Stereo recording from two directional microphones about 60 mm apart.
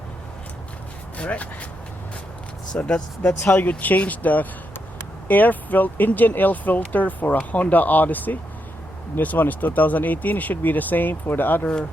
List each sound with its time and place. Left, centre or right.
1.2 s speech: left
2.7 s speech: centre
3.4 s speech: left
11.6 s speech: centre